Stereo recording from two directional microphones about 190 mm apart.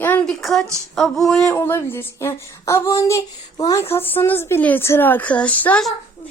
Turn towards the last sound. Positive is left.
turn(degrees=5)  # may be behind; listen again after turning